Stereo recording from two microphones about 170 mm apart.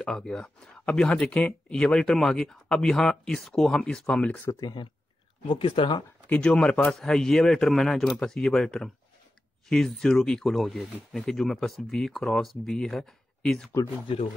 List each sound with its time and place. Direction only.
0.0 s speech: 5° left (ahead or behind)
4.6 s speech: 25° left (ahead or behind)
6.2 s speech: 10° left (ahead or behind)